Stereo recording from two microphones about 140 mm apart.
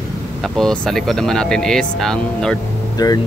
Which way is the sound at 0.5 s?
5° left (ahead or behind).